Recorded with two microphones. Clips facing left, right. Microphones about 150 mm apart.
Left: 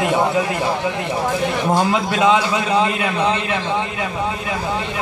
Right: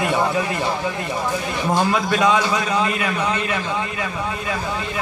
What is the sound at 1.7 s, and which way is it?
A man's voice, 15° left (ahead or behind).